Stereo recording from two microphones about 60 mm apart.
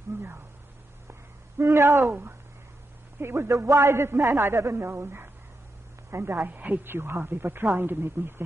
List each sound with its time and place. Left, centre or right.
0.1 s a sound: right
1.6 s a man's voice: right
3.2 s a man's voice: right
3.9 s a woman's voice: right
4.2 s a woman's voice: right
6.4 s a woman's voice: right
6.9 s speech: right